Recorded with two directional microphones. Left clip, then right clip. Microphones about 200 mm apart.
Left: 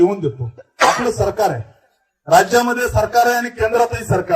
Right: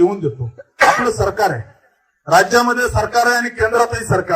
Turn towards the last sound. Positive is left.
turn(degrees=15)  # may be behind; listen again after turning